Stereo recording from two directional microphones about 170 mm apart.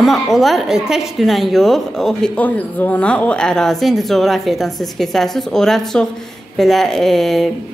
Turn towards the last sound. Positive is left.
turn(degrees=0)  # may be behind; listen again after turning